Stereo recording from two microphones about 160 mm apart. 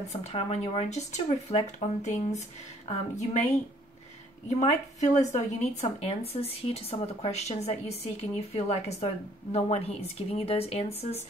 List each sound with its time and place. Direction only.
0.1 s speech: 40° left (ahead or behind)
4.5 s a woman's voice: 45° left (ahead or behind)